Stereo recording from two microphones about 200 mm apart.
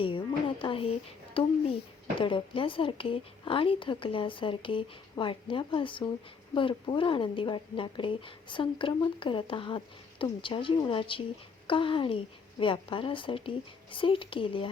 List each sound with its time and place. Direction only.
0.0 s speech: 25° left (ahead or behind)